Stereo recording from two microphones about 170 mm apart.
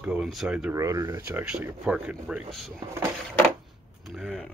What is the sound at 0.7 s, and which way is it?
Speech, 20° right (ahead or behind).